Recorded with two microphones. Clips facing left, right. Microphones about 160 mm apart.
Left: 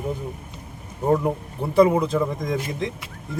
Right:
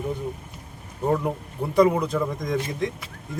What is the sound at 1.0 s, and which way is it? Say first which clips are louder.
Speech: left 3 dB; 20° left (ahead or behind).